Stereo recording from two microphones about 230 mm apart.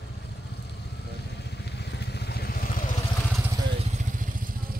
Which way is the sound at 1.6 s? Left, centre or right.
Left.